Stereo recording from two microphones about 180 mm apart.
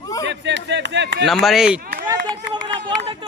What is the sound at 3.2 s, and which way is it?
Speech, 30° right (ahead or behind).